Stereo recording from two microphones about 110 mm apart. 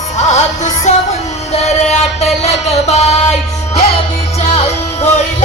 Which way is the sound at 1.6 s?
85° left.